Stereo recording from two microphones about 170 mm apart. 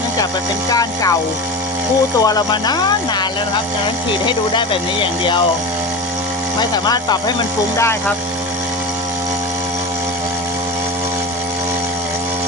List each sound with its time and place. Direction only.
0.7 s speech: 20° left (ahead or behind)
2.2 s speech: 25° left (ahead or behind)
6.6 s speech: 25° left (ahead or behind)